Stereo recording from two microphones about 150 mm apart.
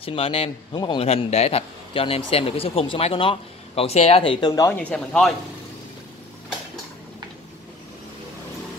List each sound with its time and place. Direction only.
0.0 s speech: 40° left (ahead or behind); by 4.7 s 25° left (ahead or behind)
4.7 s speech: 5° left (ahead or behind)